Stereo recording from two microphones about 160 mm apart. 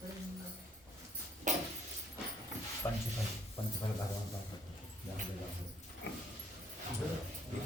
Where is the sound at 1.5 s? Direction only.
50° right (ahead or behind).